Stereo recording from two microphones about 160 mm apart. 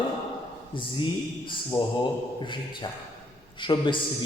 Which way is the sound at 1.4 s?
30° left (ahead or behind).